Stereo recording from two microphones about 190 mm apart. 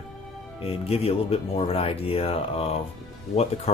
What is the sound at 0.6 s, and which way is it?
Speech, 30° left (ahead or behind).